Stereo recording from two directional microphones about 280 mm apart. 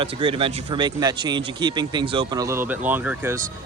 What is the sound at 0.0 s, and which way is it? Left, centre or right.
Speech, centre.